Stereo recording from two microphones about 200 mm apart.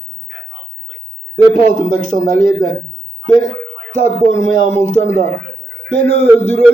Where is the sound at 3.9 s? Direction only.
35° left (ahead or behind).